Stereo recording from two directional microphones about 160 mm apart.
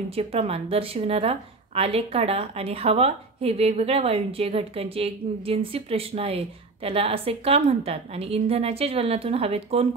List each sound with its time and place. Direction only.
0.1 s speech: 40° right (ahead or behind)